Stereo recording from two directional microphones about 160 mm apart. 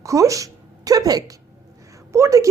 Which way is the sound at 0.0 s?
20° right (ahead or behind).